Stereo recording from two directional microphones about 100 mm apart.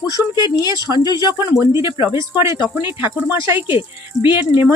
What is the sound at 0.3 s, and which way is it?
Speech, 45° left (ahead or behind).